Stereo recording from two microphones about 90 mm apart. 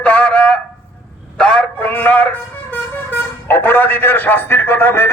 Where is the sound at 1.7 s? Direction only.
20° left (ahead or behind).